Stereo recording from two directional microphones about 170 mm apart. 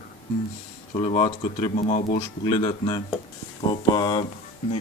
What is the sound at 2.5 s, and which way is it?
Speech, 25° left (ahead or behind).